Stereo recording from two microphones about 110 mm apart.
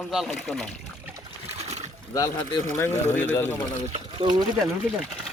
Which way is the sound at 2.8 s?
20° left (ahead or behind).